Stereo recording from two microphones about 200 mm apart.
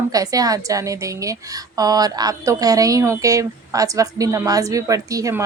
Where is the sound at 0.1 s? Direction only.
15° right (ahead or behind).